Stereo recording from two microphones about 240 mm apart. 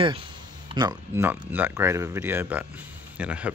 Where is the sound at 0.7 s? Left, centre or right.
Centre.